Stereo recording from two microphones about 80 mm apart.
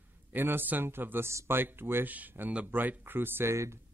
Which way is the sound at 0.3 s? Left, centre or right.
Right.